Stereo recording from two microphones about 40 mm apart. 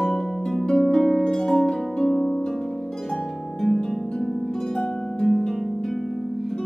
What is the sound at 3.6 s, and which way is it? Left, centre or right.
Harp, centre.